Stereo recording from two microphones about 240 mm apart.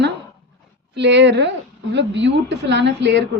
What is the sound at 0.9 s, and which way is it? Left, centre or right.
A woman's voice, right.